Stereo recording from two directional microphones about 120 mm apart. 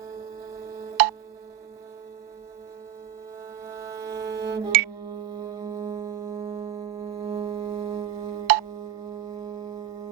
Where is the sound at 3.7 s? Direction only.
25° right (ahead or behind).